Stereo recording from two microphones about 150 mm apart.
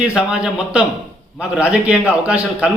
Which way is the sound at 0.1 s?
5° right (ahead or behind).